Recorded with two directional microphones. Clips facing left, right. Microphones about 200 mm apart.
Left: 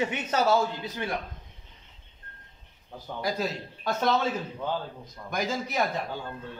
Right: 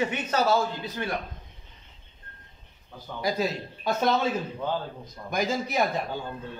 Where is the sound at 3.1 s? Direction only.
5° right (ahead or behind).